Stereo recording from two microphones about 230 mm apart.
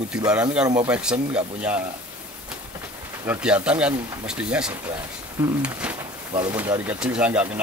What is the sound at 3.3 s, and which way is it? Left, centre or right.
Speech, centre.